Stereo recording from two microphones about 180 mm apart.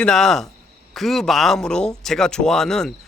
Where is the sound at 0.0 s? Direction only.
Centre (ahead or behind).